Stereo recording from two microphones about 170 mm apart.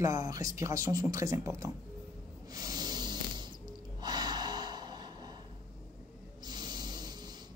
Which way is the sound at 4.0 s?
25° right (ahead or behind).